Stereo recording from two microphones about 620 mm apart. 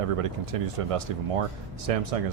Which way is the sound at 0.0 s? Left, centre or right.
Right.